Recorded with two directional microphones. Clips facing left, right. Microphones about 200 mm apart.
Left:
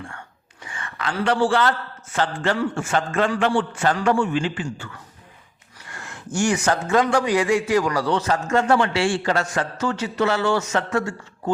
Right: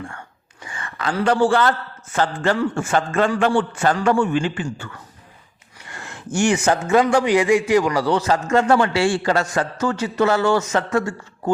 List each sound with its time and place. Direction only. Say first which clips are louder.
0.7 s a man's voice: right 3 dB; 35° right (ahead or behind)
5.9 s a man's voice: right 3 dB; 25° right (ahead or behind)
8.0 s a man's voice: right 3 dB; 35° right (ahead or behind)